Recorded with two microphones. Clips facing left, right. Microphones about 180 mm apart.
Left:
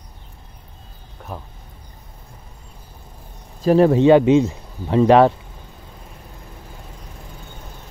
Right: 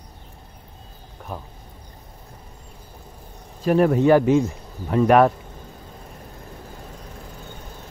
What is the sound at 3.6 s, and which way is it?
Speech, 30° left (ahead or behind).